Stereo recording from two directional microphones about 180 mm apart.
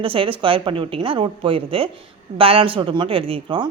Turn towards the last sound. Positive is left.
turn(degrees=-30)  # may be behind; listen again after turning